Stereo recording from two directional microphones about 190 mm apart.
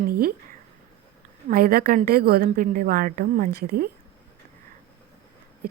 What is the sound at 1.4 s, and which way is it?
A woman's voice, 50° right (ahead or behind).